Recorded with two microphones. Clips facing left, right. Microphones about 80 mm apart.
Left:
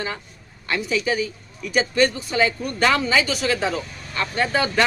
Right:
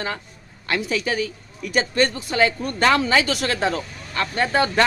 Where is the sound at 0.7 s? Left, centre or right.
Right.